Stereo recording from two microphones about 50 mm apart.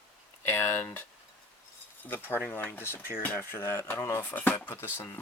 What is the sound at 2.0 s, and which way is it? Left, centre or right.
Speech, left.